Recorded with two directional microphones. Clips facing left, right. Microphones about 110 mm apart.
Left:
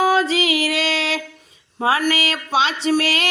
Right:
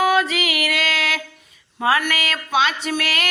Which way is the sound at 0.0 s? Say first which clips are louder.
Left 1 dB; 30° left (ahead or behind).